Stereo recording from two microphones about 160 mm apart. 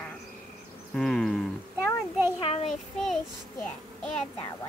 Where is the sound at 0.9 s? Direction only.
5° left (ahead or behind).